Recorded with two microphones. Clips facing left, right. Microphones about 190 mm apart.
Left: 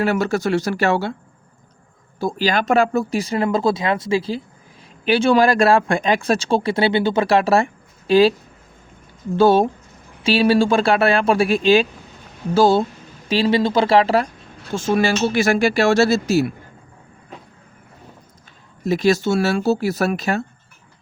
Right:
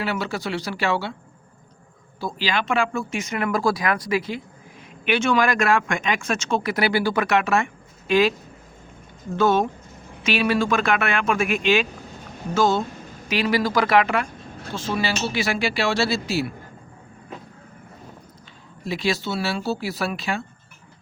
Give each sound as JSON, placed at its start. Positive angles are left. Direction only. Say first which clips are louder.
{"t": 0.0, "sound": "speech", "louder": "left 7 dB", "side_deg": 45}
{"t": 2.1, "sound": "speech", "louder": "left 6 dB", "side_deg": 45}
{"t": 9.3, "sound": "speech", "louder": "left 6 dB", "side_deg": 30}
{"t": 14.7, "sound": "speech", "louder": "left 7 dB", "side_deg": 50}
{"t": 18.8, "sound": "speech", "louder": "left 8 dB", "side_deg": 45}